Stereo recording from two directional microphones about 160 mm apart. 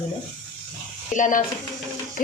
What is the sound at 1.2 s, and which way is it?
Speech, 55° left (ahead or behind).